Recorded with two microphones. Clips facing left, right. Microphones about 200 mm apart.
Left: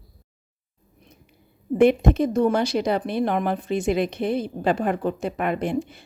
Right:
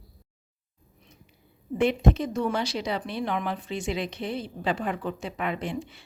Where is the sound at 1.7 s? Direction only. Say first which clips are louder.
Left 6 dB; 55° left (ahead or behind).